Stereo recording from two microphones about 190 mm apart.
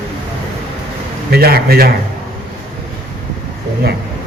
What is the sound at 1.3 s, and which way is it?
Speech, 55° right (ahead or behind).